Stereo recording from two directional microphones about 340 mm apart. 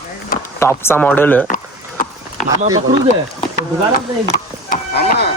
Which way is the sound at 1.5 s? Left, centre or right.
Left.